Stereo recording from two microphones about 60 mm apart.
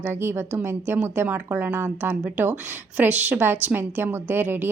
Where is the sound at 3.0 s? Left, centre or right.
Right.